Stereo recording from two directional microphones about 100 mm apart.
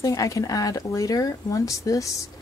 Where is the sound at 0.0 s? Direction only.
35° left (ahead or behind).